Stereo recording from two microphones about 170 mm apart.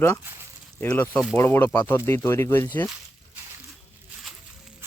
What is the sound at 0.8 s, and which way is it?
Speech, 10° left (ahead or behind).